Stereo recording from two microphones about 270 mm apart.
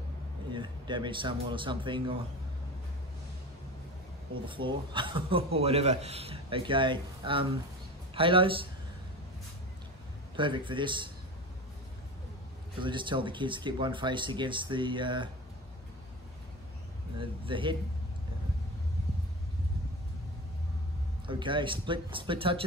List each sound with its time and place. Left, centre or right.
0.5 s speech: centre
4.5 s a man's voice: centre
10.3 s speech: centre
12.7 s speech: centre
17.2 s a man's voice: centre
21.3 s speech: centre